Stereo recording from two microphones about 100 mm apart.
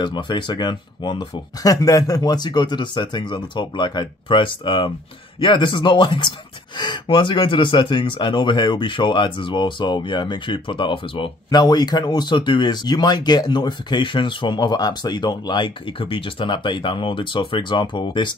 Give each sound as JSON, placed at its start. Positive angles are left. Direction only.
{"t": 0.0, "sound": "speech", "side_deg": 50}